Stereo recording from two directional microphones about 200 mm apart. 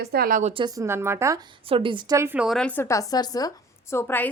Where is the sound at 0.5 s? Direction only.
20° right (ahead or behind).